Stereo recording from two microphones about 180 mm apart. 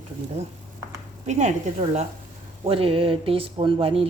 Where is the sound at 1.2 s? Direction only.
40° right (ahead or behind).